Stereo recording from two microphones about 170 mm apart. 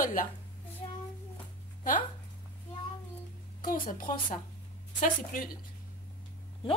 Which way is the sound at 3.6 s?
50° left (ahead or behind).